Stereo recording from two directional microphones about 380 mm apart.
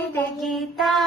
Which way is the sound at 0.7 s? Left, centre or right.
Centre.